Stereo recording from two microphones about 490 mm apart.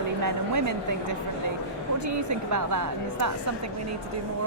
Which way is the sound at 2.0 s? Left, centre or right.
Right.